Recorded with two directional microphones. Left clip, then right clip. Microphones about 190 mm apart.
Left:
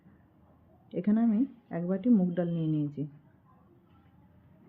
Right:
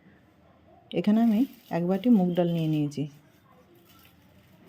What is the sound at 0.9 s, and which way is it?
Speech, 20° right (ahead or behind).